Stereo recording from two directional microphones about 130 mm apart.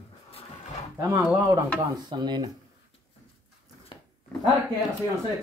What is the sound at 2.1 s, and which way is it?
Speech, 35° right (ahead or behind).